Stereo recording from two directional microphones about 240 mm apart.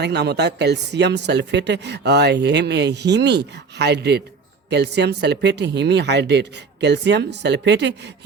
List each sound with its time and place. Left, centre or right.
0.0 s speech: right